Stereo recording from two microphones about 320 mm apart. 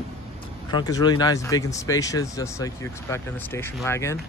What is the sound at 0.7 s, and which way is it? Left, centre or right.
Speech, centre.